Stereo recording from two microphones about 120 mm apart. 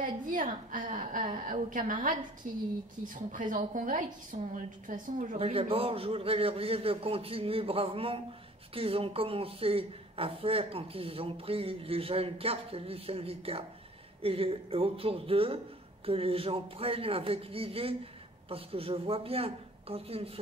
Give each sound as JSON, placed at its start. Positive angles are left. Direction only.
{"t": 0.3, "sound": "a woman's voice", "side_deg": -90}
{"t": 4.3, "sound": "a woman's voice", "side_deg": -75}
{"t": 4.8, "sound": "a woman's voice", "side_deg": -90}
{"t": 5.4, "sound": "a woman's voice", "side_deg": -50}